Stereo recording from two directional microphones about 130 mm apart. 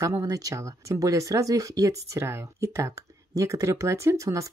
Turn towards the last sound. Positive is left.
turn(degrees=-25)  # may be behind; listen again after turning